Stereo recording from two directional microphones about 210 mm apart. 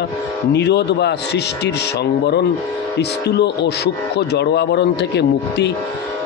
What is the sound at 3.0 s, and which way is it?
Speech, 55° left (ahead or behind).